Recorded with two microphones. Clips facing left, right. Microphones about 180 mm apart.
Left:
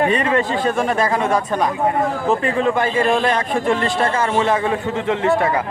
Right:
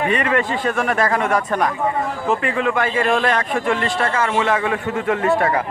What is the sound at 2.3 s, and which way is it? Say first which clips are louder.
A man's voice: left 1 dB; 35° left (ahead or behind).